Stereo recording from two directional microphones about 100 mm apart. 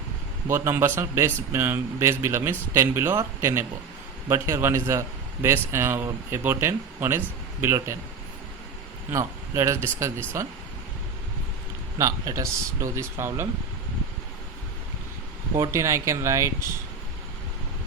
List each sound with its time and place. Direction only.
0.4 s a man's voice: 25° right (ahead or behind)
9.1 s a man's voice: 30° right (ahead or behind)
11.9 s a man's voice: 35° right (ahead or behind)
15.7 s speech: 30° right (ahead or behind)